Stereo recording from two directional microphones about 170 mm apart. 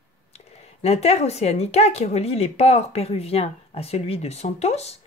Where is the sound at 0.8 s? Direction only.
40° left (ahead or behind).